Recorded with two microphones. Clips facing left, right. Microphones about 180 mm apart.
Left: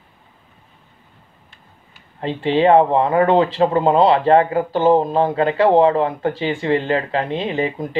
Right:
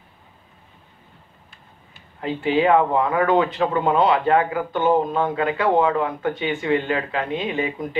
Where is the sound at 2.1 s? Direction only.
30° left (ahead or behind).